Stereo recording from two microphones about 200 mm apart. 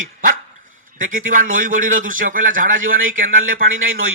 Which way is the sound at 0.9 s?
40° right (ahead or behind).